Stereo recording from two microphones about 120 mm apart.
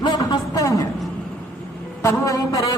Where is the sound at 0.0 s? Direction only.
40° left (ahead or behind).